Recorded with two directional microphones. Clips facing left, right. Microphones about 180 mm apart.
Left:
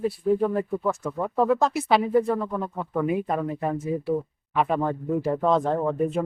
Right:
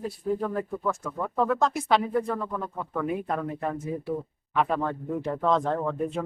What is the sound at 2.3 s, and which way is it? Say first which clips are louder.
Speech: left 4 dB; 20° left (ahead or behind).